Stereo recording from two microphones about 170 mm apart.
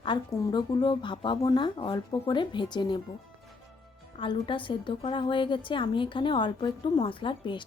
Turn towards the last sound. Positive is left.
turn(degrees=30)  # may be behind; listen again after turning